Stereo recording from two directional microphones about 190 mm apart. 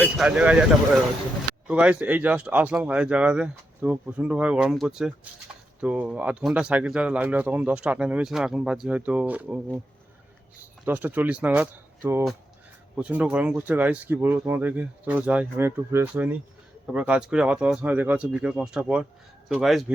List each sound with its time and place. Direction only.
0.0 s speech: 5° right (ahead or behind)
1.6 s speech: 5° right (ahead or behind)
10.8 s speech: 10° right (ahead or behind)